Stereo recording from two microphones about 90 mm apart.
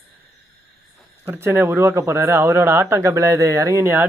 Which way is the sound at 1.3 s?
25° right (ahead or behind).